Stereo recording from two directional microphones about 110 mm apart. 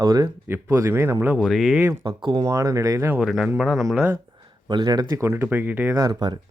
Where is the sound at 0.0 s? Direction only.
35° right (ahead or behind).